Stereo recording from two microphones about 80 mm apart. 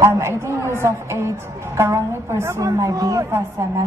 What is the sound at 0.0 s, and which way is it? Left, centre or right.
A woman's voice, right.